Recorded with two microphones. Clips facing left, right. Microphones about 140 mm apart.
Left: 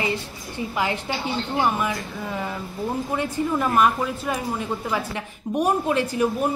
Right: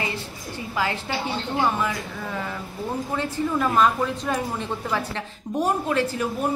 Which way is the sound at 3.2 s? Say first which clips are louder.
Even; 15° left (ahead or behind).